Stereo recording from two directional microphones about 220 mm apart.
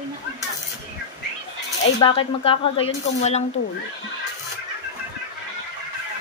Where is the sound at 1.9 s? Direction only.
25° left (ahead or behind).